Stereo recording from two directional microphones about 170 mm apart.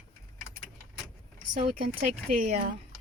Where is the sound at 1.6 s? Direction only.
55° right (ahead or behind).